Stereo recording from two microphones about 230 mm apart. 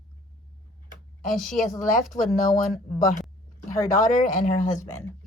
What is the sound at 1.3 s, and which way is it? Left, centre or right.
A woman's voice, centre.